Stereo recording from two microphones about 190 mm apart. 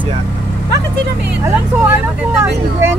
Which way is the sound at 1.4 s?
15° right (ahead or behind).